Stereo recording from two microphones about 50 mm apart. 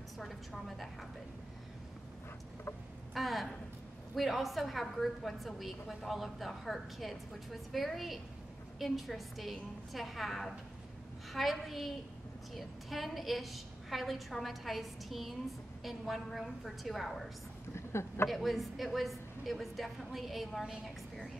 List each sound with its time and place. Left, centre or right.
0.2 s a woman's voice: centre
3.2 s a woman's voice: centre
17.7 s a sound: left
18.3 s a woman's voice: centre